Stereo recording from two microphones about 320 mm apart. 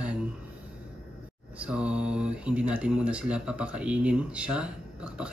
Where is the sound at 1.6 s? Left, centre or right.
Centre.